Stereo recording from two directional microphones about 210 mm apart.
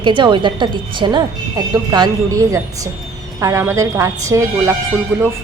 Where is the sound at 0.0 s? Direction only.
20° right (ahead or behind).